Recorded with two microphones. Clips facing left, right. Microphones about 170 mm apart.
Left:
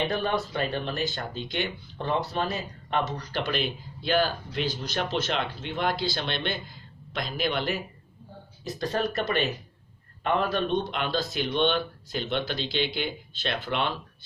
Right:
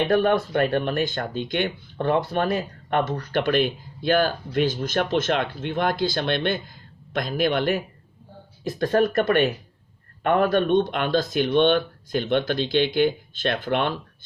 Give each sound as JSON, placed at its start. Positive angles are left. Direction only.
{"t": 0.1, "sound": "speech", "side_deg": -55}